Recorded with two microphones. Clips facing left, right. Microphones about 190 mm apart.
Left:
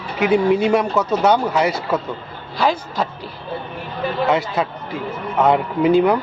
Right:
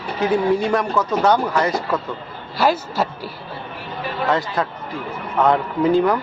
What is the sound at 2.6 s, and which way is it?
Speech, 5° right (ahead or behind).